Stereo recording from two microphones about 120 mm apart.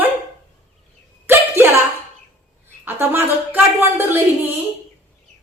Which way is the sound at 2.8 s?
20° right (ahead or behind).